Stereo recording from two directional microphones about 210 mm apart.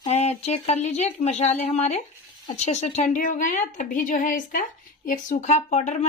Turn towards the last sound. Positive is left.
turn(degrees=35)  # may be behind; listen again after turning